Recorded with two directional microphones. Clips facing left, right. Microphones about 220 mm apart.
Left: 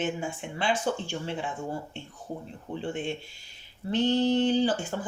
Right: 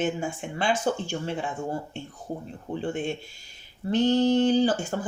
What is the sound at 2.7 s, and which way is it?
Speech, 45° right (ahead or behind).